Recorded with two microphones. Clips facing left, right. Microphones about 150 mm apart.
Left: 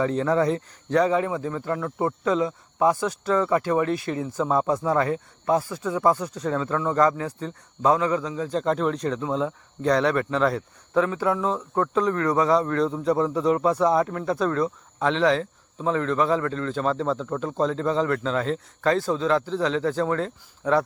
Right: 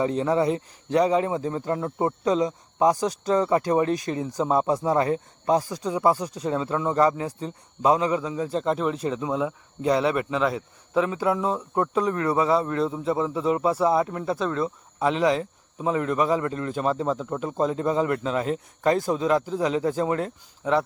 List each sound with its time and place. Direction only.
0.0 s speech: 10° right (ahead or behind)
1.1 s speech: 25° right (ahead or behind)
2.4 s speech: 15° right (ahead or behind)
4.3 s speech: 15° right (ahead or behind)
5.0 s speech: 25° right (ahead or behind)
5.5 s speech: 15° right (ahead or behind)
8.4 s speech: 5° right (ahead or behind)
10.9 s speech: 20° right (ahead or behind)